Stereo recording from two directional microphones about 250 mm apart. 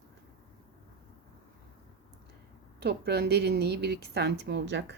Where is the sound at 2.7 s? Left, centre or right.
Right.